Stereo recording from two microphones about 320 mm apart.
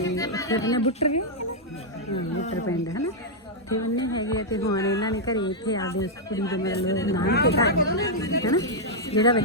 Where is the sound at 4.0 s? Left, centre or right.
Centre.